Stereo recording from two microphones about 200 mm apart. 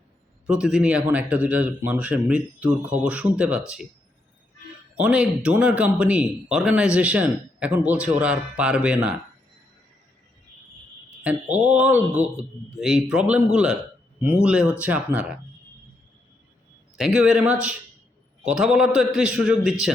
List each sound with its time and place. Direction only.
0.4 s speech: 5° right (ahead or behind)
4.9 s speech: 5° right (ahead or behind)
11.2 s a man's voice: 5° right (ahead or behind)
17.0 s a man's voice: 5° right (ahead or behind)